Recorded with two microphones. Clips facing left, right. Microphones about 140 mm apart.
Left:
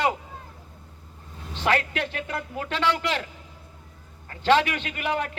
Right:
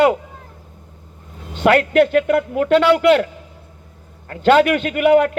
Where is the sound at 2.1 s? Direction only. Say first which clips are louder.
Right 16 dB; 65° right (ahead or behind).